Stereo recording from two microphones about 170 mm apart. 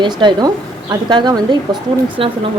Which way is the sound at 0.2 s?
25° right (ahead or behind).